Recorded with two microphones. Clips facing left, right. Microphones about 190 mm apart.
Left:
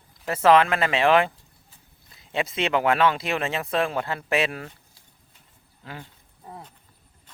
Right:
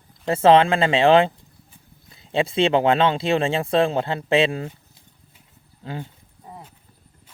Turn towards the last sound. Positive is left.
turn(degrees=-5)  # may be behind; listen again after turning